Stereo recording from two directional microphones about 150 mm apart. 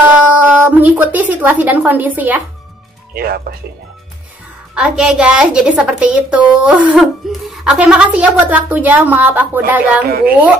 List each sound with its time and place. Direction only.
0.3 s a woman's voice: 10° right (ahead or behind)
3.2 s speech: 85° right
4.7 s a woman's voice: 5° right (ahead or behind)
10.0 s a woman's voice: 90° right